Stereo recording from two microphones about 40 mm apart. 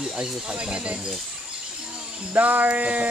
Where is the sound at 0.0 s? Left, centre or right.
Right.